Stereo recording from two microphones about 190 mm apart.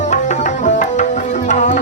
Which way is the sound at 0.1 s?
40° left (ahead or behind).